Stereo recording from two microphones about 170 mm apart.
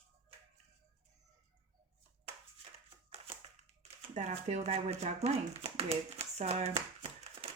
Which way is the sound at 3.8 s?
40° right (ahead or behind).